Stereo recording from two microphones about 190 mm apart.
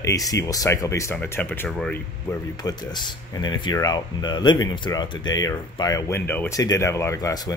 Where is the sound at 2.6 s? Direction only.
20° left (ahead or behind).